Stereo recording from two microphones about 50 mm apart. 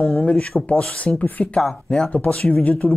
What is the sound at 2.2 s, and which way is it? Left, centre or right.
Speech, left.